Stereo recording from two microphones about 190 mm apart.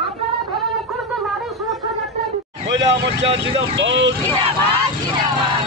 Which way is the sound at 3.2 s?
30° right (ahead or behind).